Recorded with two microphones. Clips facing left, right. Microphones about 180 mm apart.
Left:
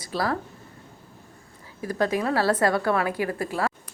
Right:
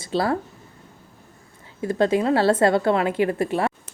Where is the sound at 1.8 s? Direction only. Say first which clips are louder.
Right 5 dB; 25° right (ahead or behind).